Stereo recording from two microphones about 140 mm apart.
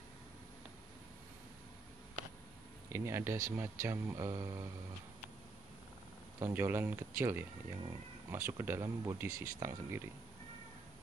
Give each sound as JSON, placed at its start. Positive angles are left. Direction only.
{"t": 2.9, "sound": "speech", "side_deg": -20}
{"t": 6.4, "sound": "speech", "side_deg": -15}